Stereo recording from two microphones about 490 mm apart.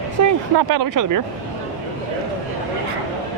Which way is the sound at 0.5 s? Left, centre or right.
Right.